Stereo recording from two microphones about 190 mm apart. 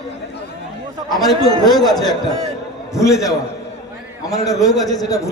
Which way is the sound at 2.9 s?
15° left (ahead or behind).